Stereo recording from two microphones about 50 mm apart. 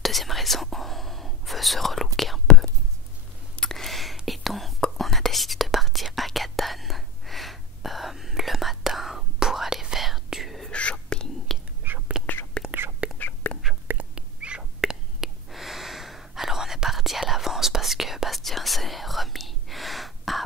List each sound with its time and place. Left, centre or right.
0.0 s whispering: centre
3.7 s a sound: centre
4.3 s whispering: centre
10.7 s whispering: left
11.5 s whispering: centre
12.1 s whispering: centre
12.6 s whispering: centre
13.0 s whispering: right
13.4 s whispering: left
14.1 s bird: right
14.6 s whispering: centre